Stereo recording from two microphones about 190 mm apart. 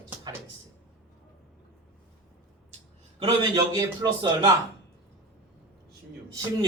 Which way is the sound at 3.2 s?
20° right (ahead or behind).